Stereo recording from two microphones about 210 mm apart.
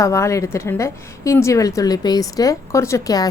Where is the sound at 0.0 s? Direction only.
15° left (ahead or behind).